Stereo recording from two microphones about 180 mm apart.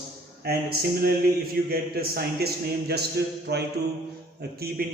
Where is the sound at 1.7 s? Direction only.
55° right (ahead or behind).